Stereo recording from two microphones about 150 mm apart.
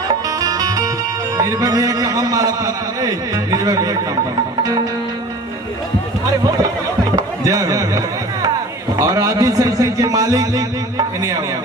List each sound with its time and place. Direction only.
0.3 s music: 25° right (ahead or behind)
1.4 s a man's voice: 25° right (ahead or behind)
7.4 s a sound: 25° right (ahead or behind)
9.0 s a man's voice: 25° right (ahead or behind)